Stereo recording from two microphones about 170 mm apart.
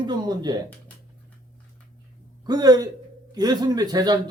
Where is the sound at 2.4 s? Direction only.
25° right (ahead or behind).